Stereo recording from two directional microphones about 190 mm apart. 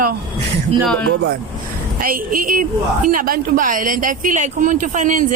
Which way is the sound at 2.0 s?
50° right (ahead or behind).